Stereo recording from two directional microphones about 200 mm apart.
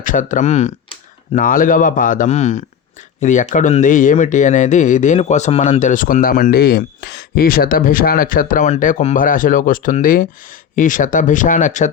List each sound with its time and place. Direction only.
0.0 s speech: 40° left (ahead or behind)